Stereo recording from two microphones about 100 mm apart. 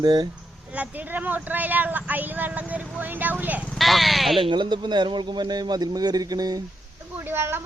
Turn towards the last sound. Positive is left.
turn(degrees=-25)  # may be behind; listen again after turning